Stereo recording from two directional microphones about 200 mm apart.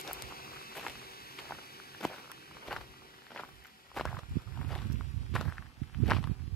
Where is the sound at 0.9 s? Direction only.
50° left (ahead or behind).